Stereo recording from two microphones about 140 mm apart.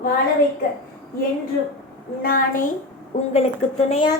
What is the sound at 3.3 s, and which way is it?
Speech, 45° left (ahead or behind).